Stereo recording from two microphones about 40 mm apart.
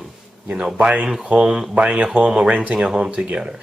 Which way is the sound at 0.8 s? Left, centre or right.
Right.